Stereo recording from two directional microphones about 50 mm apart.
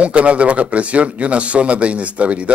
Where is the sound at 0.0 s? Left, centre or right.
Right.